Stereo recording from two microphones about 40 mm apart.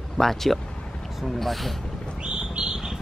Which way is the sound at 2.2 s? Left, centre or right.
Right.